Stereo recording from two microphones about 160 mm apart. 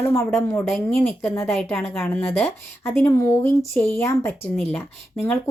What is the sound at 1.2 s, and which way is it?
Speech, 15° left (ahead or behind).